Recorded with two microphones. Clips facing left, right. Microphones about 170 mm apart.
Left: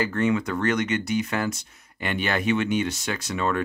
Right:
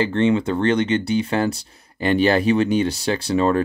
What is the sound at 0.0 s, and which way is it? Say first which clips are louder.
Speech: right 5 dB; 30° right (ahead or behind).